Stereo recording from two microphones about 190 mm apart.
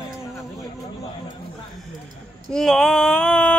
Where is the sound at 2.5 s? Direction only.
5° left (ahead or behind).